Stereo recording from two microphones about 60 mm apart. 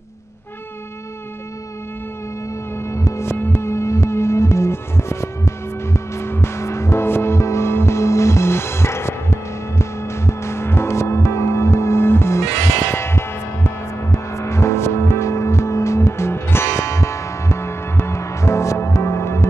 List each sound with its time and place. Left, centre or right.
2.9 s music: left
16.8 s music: left